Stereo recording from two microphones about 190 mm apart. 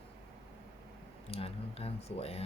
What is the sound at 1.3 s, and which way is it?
Speech, 30° left (ahead or behind).